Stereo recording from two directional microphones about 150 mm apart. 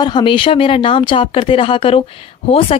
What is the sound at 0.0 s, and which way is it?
Speech, 30° left (ahead or behind).